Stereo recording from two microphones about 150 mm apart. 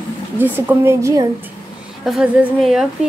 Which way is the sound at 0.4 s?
15° right (ahead or behind).